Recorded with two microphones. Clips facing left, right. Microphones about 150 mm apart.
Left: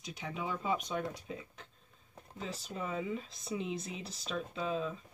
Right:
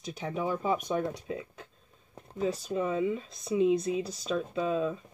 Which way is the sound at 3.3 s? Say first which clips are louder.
Right 12 dB; 30° left (ahead or behind).